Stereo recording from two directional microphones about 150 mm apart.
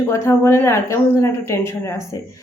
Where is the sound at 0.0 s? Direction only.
20° left (ahead or behind).